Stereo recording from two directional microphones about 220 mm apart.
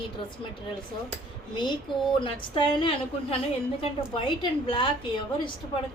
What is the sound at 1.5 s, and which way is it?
A woman's voice, 20° left (ahead or behind).